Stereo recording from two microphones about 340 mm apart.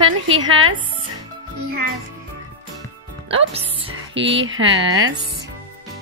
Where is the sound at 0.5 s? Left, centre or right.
Right.